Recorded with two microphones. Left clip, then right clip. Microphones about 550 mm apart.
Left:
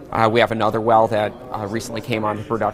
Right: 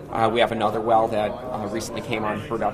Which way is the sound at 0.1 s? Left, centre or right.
Left.